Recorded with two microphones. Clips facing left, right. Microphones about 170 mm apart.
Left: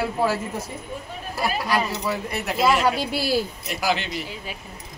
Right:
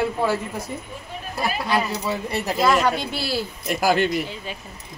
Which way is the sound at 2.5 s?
5° left (ahead or behind).